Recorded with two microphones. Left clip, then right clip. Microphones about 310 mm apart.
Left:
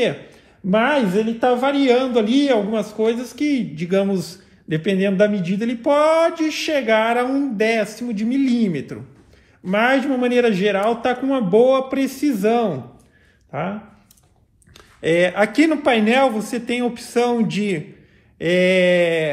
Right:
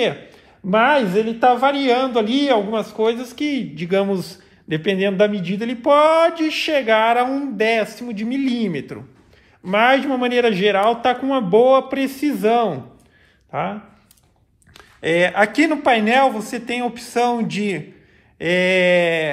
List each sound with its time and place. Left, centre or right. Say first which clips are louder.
0.7 s a man's voice: right 2 dB; right
14.8 s a man's voice: even; right